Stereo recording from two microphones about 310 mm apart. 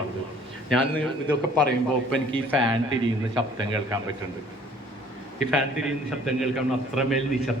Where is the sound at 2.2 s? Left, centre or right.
Centre.